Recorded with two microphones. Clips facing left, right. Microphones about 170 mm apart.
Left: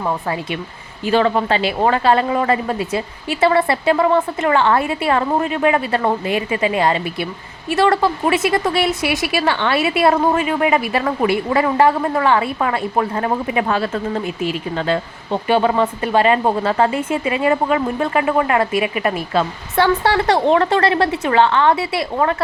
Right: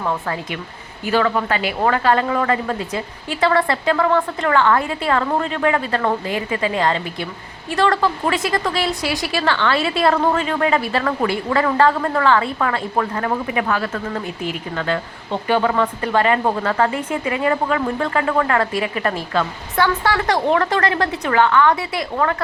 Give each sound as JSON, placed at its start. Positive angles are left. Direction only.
{"t": 0.0, "sound": "speech", "side_deg": 15}